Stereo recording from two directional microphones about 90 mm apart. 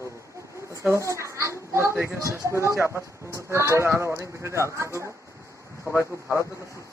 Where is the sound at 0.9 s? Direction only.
35° right (ahead or behind).